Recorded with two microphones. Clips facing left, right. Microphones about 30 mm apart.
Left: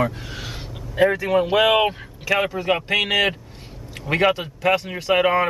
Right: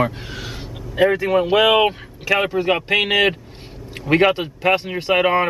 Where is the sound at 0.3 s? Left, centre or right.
Centre.